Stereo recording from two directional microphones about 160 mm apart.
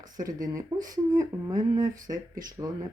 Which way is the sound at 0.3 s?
20° right (ahead or behind).